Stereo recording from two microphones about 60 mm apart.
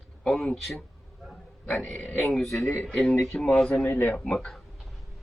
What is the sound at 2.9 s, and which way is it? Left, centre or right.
Speech, centre.